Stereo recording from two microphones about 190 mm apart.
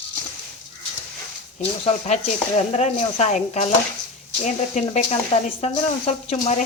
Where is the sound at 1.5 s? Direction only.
35° left (ahead or behind).